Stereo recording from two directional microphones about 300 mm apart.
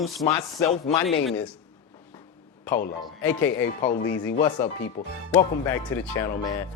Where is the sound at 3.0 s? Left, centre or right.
Centre.